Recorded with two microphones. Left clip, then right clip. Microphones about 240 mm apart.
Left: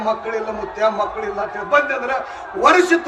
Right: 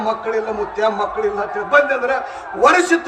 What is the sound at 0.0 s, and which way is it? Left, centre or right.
A man's voice, right.